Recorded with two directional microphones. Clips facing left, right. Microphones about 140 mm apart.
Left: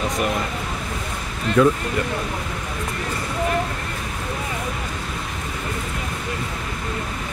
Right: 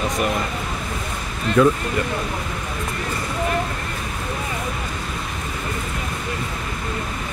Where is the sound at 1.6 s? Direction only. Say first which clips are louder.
Right 1 dB; 10° right (ahead or behind).